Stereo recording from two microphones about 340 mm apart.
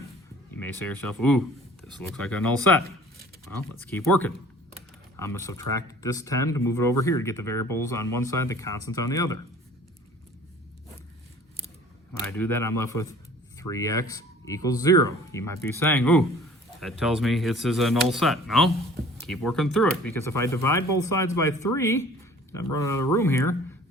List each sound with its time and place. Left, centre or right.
0.5 s speech: centre
12.4 s speech: centre